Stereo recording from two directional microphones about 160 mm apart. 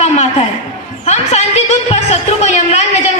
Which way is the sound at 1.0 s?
45° left (ahead or behind).